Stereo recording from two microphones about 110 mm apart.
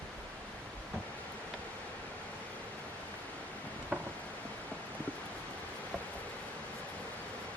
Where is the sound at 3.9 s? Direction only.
15° right (ahead or behind).